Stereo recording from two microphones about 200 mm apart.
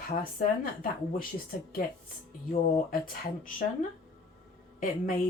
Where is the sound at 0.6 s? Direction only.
45° left (ahead or behind).